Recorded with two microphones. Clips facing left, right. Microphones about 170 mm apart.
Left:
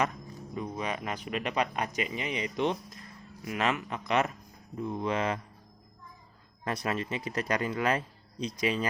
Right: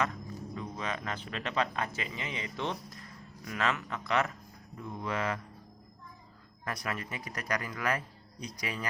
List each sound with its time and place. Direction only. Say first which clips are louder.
0.0 s speech: left 2 dB; 15° left (ahead or behind)
6.7 s speech: left 5 dB; 25° left (ahead or behind)